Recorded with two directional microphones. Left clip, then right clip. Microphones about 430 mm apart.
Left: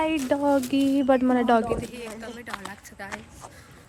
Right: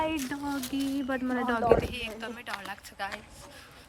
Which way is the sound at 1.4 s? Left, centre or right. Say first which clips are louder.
Left 9 dB; centre.